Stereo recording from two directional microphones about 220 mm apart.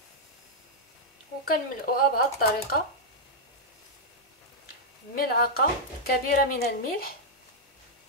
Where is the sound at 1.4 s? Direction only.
40° left (ahead or behind).